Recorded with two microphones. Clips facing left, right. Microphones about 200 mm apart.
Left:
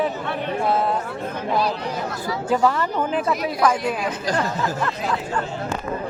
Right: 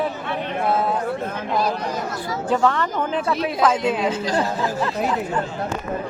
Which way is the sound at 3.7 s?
20° right (ahead or behind).